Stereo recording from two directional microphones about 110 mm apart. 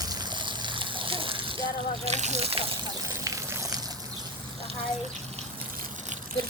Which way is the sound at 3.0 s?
30° right (ahead or behind).